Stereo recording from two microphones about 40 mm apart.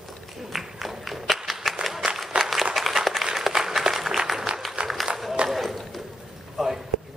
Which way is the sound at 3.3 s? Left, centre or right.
Centre.